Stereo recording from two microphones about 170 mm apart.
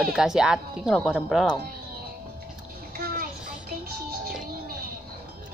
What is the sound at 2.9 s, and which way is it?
Bathtub, 60° right (ahead or behind).